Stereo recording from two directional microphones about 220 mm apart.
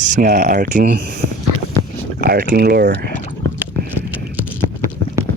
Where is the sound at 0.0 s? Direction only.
35° right (ahead or behind).